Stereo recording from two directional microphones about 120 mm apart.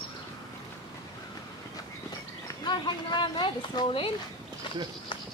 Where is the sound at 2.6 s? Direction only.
40° left (ahead or behind).